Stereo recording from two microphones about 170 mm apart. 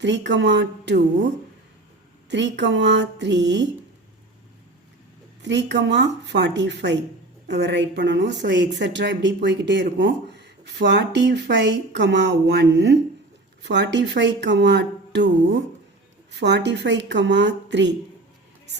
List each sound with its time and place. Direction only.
0.0 s a woman's voice: 90° right
2.3 s a woman's voice: 90° right
5.4 s a woman's voice: 90° right
16.3 s a woman's voice: 90° right